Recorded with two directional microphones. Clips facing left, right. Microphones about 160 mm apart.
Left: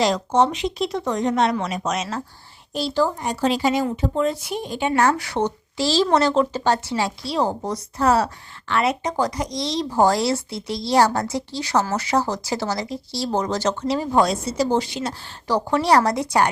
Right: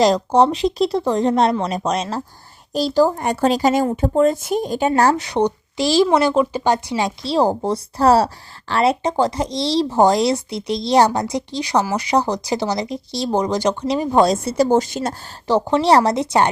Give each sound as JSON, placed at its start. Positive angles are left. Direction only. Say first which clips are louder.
{"t": 0.0, "sound": "speech", "louder": "right 4 dB", "side_deg": -35}
{"t": 3.2, "sound": "speech", "louder": "right 4 dB", "side_deg": -55}
{"t": 3.5, "sound": "speech", "louder": "right 4 dB", "side_deg": -45}
{"t": 5.1, "sound": "speech", "louder": "right 5 dB", "side_deg": -20}
{"t": 10.0, "sound": "a woman's voice", "louder": "right 2 dB", "side_deg": -20}
{"t": 14.4, "sound": "speech", "louder": "right 5 dB", "side_deg": -55}
{"t": 15.4, "sound": "speech", "louder": "right 4 dB", "side_deg": -25}